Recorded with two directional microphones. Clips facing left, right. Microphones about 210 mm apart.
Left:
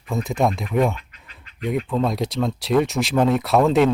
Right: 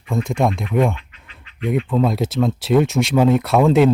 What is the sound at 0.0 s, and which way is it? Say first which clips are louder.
Speech: right 2 dB; centre (ahead or behind).